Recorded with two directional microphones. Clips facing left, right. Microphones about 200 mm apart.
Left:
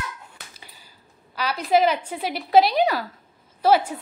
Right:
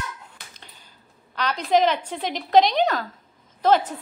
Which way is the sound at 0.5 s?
5° left (ahead or behind).